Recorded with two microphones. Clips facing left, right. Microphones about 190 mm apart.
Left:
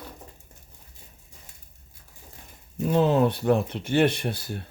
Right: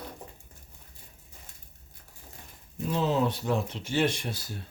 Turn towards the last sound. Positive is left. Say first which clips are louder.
# left 5 dB
turn(degrees=60)  # may be behind; listen again after turning